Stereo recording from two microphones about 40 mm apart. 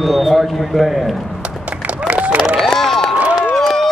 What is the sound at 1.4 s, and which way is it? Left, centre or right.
Music, right.